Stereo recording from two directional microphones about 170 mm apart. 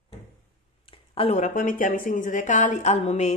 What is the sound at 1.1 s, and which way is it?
A woman's voice, 35° left (ahead or behind).